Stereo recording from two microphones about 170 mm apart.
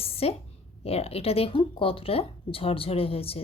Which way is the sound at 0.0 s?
35° left (ahead or behind).